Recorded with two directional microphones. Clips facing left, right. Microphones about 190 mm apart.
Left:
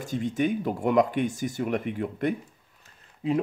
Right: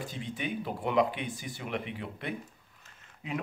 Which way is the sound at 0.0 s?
45° left (ahead or behind).